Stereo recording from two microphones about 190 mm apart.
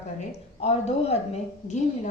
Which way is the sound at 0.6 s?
35° left (ahead or behind).